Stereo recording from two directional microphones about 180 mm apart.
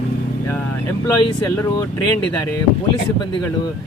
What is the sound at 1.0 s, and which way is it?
Speech, 20° left (ahead or behind).